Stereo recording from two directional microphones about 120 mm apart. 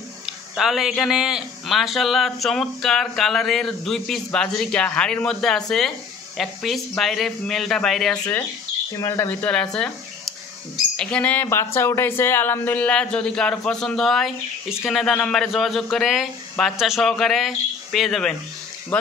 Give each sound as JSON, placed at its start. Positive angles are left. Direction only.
{"t": 0.6, "sound": "speech", "side_deg": -5}
{"t": 8.9, "sound": "speech", "side_deg": 25}
{"t": 9.3, "sound": "speech", "side_deg": 10}
{"t": 11.0, "sound": "speech", "side_deg": 10}
{"t": 11.4, "sound": "speech", "side_deg": 20}